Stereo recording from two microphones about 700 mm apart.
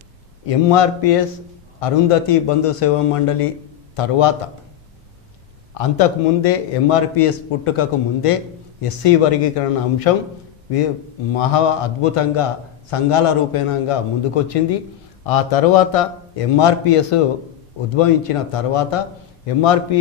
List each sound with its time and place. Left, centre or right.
0.5 s a man's voice: left
5.8 s a man's voice: left